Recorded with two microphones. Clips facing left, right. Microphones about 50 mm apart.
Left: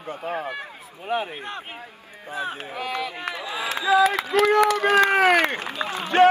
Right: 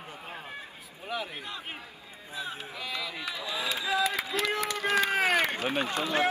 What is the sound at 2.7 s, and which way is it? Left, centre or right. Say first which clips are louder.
Speech: left 8 dB; left.